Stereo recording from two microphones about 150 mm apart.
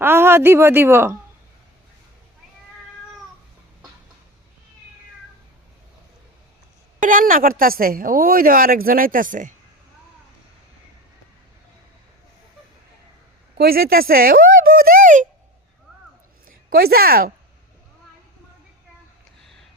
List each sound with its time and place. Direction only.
0.0 s a woman's voice: 15° right (ahead or behind)
7.0 s a woman's voice: 65° right (ahead or behind)
13.6 s speech: 90° right; by 15.3 s 60° right (ahead or behind)
16.5 s a woman's voice: 80° right